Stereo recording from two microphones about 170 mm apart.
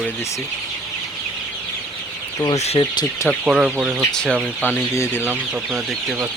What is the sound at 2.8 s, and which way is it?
Speech, 25° left (ahead or behind).